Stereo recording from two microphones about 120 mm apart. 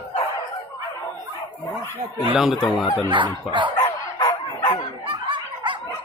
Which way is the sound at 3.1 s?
40° right (ahead or behind).